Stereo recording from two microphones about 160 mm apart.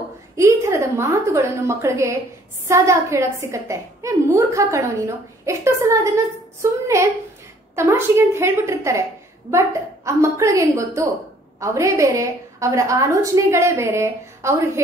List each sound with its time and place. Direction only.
0.4 s a woman's voice: 20° right (ahead or behind)
10.0 s a woman's voice: 20° right (ahead or behind)